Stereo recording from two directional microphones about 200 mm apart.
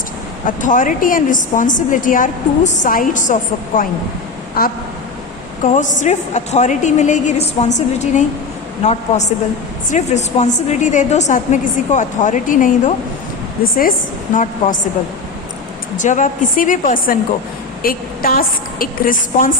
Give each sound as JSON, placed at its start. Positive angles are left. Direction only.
{"t": 0.4, "sound": "a woman's voice", "side_deg": 40}
{"t": 16.0, "sound": "a woman's voice", "side_deg": 40}